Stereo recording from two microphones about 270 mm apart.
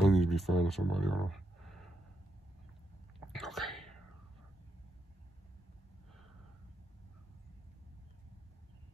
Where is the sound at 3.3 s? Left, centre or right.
Centre.